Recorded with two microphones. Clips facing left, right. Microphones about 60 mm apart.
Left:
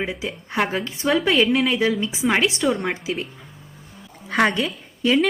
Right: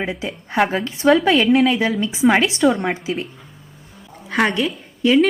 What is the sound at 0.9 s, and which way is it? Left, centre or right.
A woman's voice, right.